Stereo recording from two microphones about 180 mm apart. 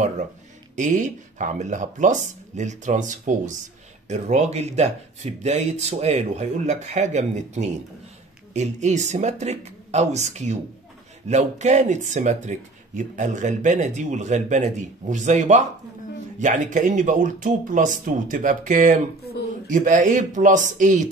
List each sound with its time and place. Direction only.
0.7 s speech: 45° right (ahead or behind)